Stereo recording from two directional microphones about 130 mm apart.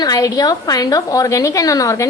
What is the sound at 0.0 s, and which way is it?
A woman's voice, 30° left (ahead or behind).